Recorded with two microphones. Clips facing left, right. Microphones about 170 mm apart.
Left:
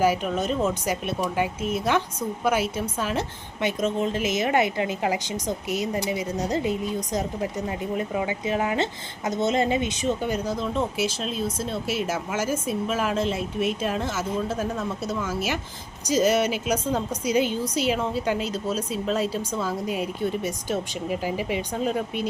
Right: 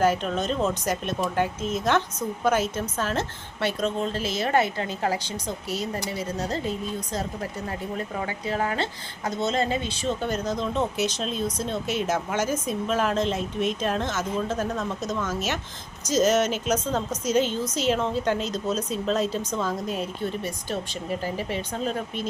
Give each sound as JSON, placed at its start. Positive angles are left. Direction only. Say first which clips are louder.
{"t": 0.0, "sound": "a woman's voice", "louder": "left 1 dB", "side_deg": 10}